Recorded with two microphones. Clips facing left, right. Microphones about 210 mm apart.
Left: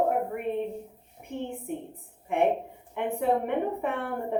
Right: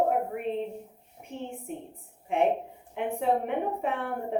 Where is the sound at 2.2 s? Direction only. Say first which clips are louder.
Left 1 dB; 55° left (ahead or behind).